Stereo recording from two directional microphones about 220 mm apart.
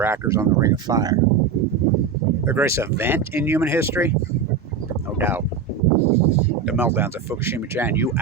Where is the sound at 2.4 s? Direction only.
10° right (ahead or behind).